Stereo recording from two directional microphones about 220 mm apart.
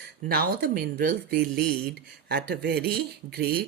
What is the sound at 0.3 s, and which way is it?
Speech, 40° right (ahead or behind).